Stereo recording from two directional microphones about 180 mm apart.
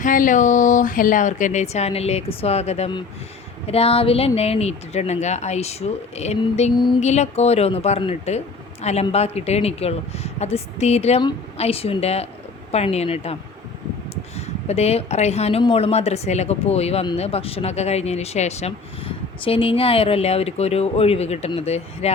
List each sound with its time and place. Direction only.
0.0 s speech: 45° left (ahead or behind)
14.3 s speech: 35° left (ahead or behind)